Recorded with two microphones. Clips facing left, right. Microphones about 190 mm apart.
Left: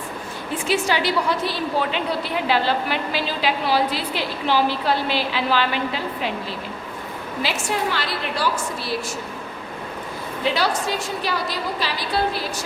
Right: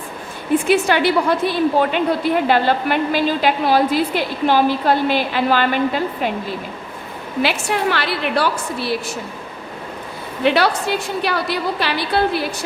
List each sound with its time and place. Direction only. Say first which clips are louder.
0.7 s a woman's voice: right 4 dB; 55° right (ahead or behind)
7.4 s a woman's voice: right 5 dB; 65° right (ahead or behind)
10.4 s a woman's voice: right 6 dB; 65° right (ahead or behind)